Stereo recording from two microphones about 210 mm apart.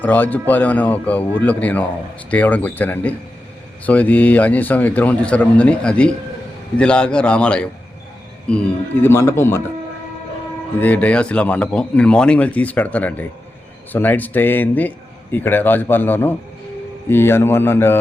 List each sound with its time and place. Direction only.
0.0 s a man's voice: 10° left (ahead or behind)
10.8 s speech: 5° left (ahead or behind)